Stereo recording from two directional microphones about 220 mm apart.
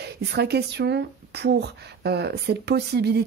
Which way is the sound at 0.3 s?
50° right (ahead or behind).